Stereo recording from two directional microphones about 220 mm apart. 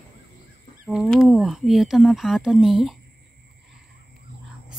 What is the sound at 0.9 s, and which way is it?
Speech, centre (ahead or behind).